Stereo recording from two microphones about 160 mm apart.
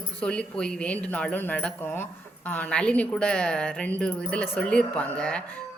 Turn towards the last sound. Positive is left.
turn(degrees=5)  # may be behind; listen again after turning